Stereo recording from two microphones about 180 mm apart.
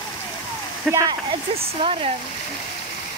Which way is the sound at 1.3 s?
30° right (ahead or behind).